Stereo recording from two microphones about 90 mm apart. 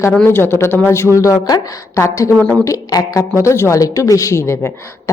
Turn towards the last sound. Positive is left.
turn(degrees=30)  # may be behind; listen again after turning